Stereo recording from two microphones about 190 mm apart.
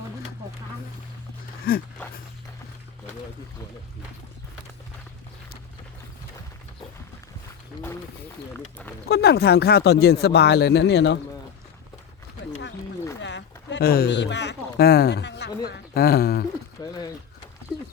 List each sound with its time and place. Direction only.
1.7 s speech: 50° left (ahead or behind)
9.0 s speech: 60° left (ahead or behind)
13.2 s speech: 70° left (ahead or behind)
16.8 s speech: 20° left (ahead or behind)